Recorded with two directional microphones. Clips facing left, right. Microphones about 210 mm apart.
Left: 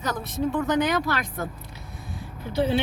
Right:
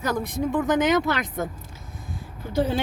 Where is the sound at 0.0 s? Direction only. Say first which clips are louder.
Right 2 dB; 10° right (ahead or behind).